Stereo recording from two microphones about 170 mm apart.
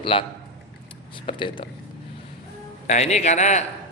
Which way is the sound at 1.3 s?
30° left (ahead or behind).